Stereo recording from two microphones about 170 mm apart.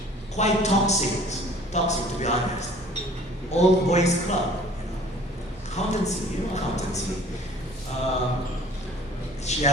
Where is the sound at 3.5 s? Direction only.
40° left (ahead or behind).